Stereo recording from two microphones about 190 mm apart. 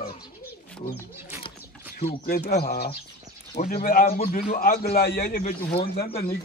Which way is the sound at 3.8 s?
50° left (ahead or behind).